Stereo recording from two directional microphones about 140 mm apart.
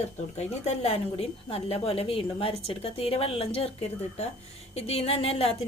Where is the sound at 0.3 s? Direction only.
50° left (ahead or behind).